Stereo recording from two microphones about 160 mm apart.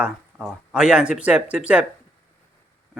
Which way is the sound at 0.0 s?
5° right (ahead or behind).